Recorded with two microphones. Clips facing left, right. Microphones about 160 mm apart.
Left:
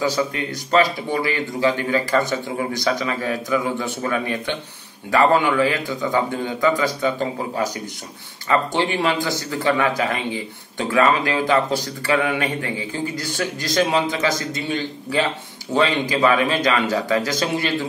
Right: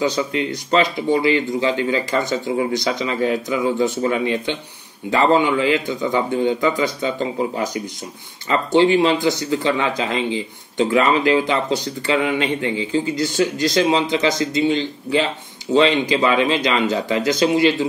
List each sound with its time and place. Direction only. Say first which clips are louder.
0.0 s speech: right 2 dB; 20° right (ahead or behind)
8.8 s speech: right 6 dB; 20° right (ahead or behind)
13.4 s speech: right 6 dB; 45° left (ahead or behind)
14.1 s speech: right 4 dB; 25° right (ahead or behind)
15.8 s speech: right 1 dB; 25° right (ahead or behind)